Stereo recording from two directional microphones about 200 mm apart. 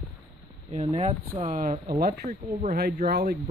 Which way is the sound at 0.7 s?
30° right (ahead or behind).